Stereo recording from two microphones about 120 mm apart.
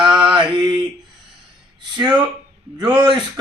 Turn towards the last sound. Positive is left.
turn(degrees=-35)  # may be behind; listen again after turning